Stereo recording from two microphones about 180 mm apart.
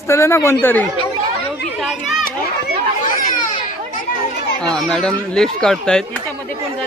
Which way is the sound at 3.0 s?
50° left (ahead or behind).